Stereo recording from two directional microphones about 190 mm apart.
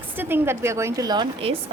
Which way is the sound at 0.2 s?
10° right (ahead or behind).